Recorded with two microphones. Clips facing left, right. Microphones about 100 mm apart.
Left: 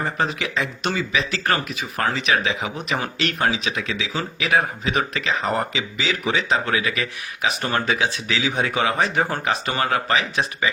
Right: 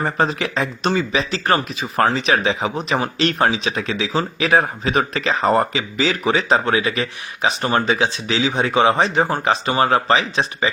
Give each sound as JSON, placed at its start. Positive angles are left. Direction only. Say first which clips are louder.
{"t": 0.0, "sound": "speech", "louder": "right 4 dB", "side_deg": -35}
{"t": 2.1, "sound": "speech", "louder": "right 3 dB", "side_deg": -35}